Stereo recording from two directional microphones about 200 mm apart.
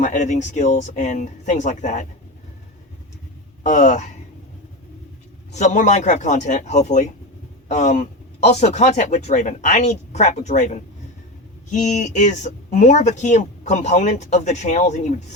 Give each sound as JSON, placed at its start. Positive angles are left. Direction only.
{"t": 0.0, "sound": "speech", "side_deg": 40}
{"t": 3.6, "sound": "speech", "side_deg": 35}
{"t": 5.5, "sound": "speech", "side_deg": 35}